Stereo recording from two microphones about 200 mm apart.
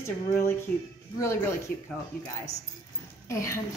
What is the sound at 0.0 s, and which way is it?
A woman's voice, 10° left (ahead or behind).